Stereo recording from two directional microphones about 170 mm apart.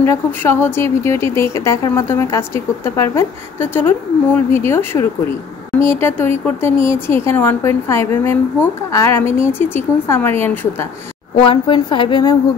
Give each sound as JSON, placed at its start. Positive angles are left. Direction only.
{"t": 0.0, "sound": "speech", "side_deg": 15}
{"t": 11.4, "sound": "a woman's voice", "side_deg": 25}